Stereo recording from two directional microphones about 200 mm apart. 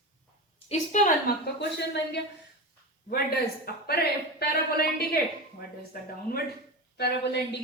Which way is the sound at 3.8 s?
50° left (ahead or behind).